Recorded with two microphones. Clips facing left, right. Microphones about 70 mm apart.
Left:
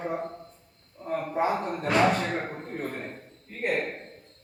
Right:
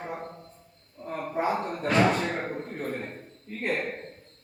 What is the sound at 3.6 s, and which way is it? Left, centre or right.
Speech, centre.